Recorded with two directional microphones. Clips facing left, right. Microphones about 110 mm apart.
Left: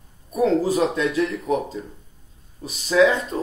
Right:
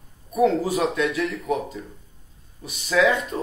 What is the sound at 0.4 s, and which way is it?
A man's voice, 35° left (ahead or behind).